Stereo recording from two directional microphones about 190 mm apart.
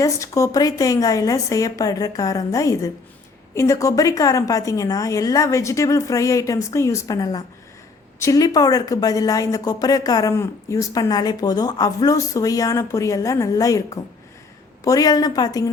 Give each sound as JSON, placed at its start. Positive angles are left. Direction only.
{"t": 0.0, "sound": "a woman's voice", "side_deg": 15}